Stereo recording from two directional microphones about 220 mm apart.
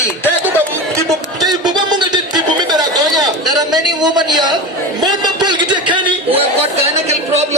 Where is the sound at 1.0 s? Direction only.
15° right (ahead or behind).